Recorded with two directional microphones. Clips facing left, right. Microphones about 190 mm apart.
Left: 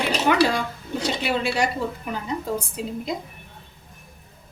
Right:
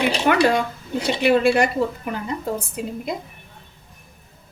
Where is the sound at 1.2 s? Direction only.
55° right (ahead or behind).